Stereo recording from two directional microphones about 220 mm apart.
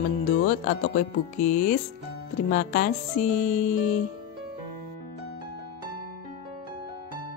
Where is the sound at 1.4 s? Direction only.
35° left (ahead or behind).